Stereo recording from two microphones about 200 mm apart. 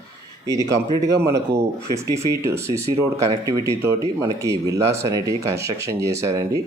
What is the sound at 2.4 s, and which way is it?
Speech, 15° right (ahead or behind).